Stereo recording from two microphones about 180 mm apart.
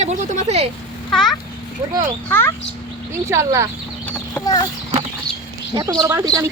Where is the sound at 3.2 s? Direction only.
15° right (ahead or behind).